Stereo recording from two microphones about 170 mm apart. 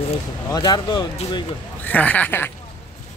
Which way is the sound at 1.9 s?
10° left (ahead or behind).